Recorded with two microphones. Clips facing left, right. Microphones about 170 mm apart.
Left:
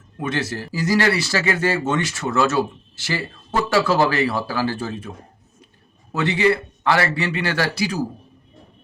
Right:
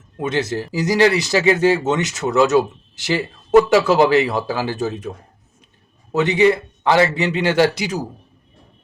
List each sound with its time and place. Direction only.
0.2 s speech: 20° right (ahead or behind)